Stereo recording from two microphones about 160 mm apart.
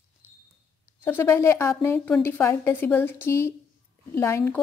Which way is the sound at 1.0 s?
15° left (ahead or behind).